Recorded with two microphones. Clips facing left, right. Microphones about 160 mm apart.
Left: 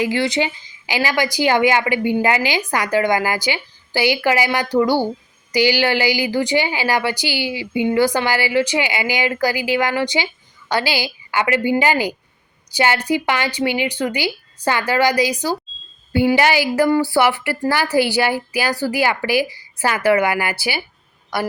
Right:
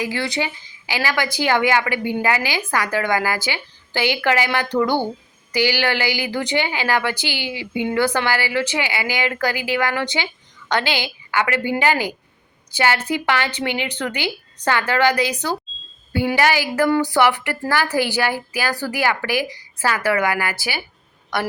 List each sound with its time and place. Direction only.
0.0 s speech: 20° left (ahead or behind)
16.9 s speech: 5° left (ahead or behind)